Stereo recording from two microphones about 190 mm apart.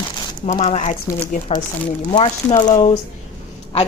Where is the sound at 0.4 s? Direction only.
35° left (ahead or behind).